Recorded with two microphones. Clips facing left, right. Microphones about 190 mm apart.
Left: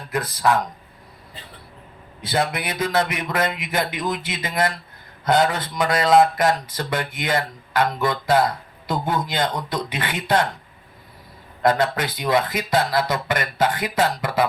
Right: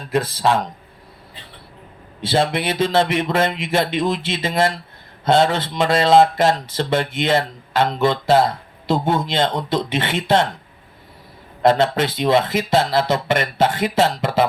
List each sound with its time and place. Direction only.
0.1 s speech: 25° right (ahead or behind)
2.2 s speech: 25° right (ahead or behind)
11.6 s speech: 25° right (ahead or behind)